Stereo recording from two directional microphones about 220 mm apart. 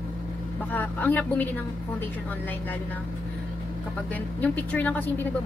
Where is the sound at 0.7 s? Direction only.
10° left (ahead or behind).